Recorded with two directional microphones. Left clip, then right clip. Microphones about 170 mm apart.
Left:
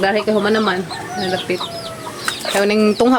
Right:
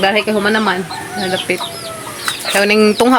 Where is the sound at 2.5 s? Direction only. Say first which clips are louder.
Right 4 dB; 5° right (ahead or behind).